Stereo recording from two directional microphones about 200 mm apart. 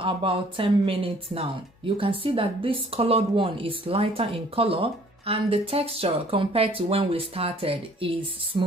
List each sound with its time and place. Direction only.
0.0 s speech: 25° right (ahead or behind)